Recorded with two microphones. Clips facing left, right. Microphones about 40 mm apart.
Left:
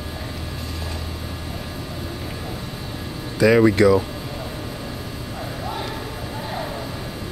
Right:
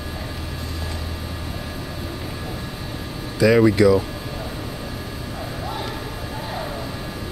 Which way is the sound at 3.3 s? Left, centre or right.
Centre.